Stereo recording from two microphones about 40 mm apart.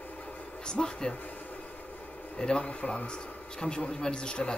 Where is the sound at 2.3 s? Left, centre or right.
Centre.